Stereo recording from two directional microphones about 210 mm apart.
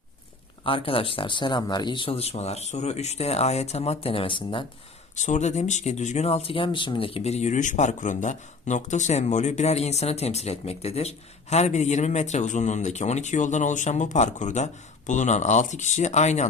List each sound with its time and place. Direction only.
0.6 s speech: 25° left (ahead or behind)
5.1 s speech: 35° left (ahead or behind)